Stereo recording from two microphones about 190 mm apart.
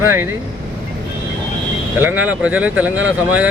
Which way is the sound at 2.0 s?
10° right (ahead or behind).